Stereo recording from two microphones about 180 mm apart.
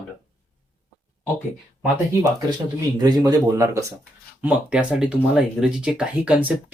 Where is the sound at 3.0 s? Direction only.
20° right (ahead or behind).